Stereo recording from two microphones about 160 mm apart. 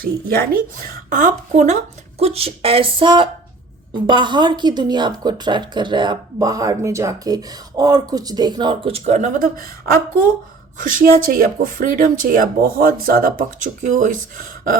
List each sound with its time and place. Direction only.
0.0 s speech: 65° right (ahead or behind)
1.1 s a woman's voice: 50° right (ahead or behind)